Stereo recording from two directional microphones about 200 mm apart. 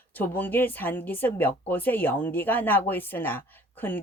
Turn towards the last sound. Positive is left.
turn(degrees=10)  # may be behind; listen again after turning